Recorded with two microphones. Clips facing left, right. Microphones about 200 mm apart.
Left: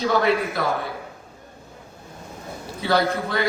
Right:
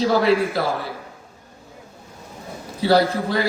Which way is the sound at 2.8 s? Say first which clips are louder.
Right 4 dB; 35° right (ahead or behind).